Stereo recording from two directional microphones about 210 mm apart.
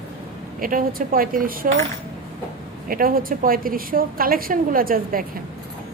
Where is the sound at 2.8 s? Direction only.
45° right (ahead or behind).